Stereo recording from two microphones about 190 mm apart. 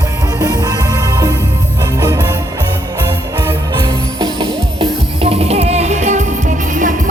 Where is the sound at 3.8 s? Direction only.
25° right (ahead or behind).